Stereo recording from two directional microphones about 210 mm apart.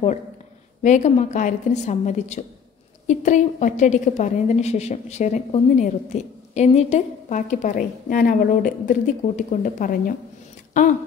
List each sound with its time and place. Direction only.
0.8 s a woman's voice: 35° left (ahead or behind)